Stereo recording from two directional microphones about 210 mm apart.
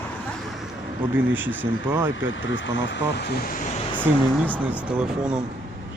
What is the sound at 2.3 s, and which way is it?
Speech, 60° left (ahead or behind).